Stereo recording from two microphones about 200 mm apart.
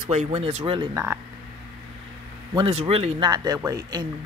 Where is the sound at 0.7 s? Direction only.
15° right (ahead or behind).